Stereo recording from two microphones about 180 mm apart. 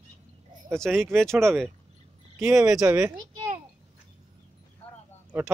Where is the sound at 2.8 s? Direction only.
15° right (ahead or behind).